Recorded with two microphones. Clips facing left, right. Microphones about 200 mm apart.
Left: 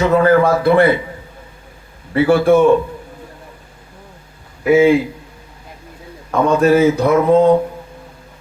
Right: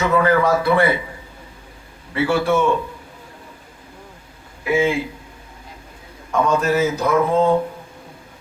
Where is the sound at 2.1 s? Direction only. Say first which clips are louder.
Left 7 dB; 50° left (ahead or behind).